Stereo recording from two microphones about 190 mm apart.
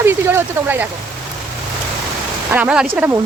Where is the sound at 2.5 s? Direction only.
5° right (ahead or behind).